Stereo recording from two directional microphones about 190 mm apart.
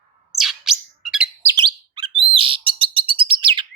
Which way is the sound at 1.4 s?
25° right (ahead or behind).